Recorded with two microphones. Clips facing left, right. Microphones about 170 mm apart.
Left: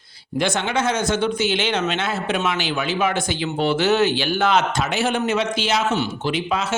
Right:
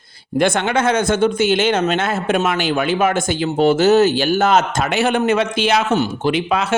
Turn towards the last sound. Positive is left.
turn(degrees=-60)  # may be behind; listen again after turning